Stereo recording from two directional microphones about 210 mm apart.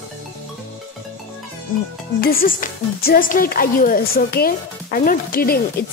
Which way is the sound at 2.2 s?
40° left (ahead or behind).